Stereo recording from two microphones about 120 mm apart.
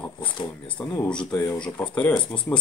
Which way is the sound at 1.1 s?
5° left (ahead or behind).